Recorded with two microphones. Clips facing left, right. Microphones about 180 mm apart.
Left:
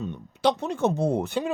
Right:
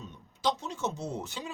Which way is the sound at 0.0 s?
65° left (ahead or behind).